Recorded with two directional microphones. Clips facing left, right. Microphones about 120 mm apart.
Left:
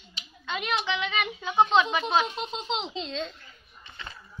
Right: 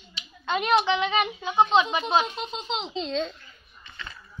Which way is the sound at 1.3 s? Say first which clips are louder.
Left 1 dB; 15° right (ahead or behind).